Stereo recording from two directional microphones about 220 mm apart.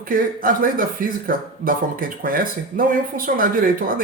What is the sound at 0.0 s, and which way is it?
Speech, 40° right (ahead or behind).